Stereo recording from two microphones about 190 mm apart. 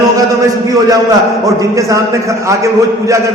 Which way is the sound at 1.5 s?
15° right (ahead or behind).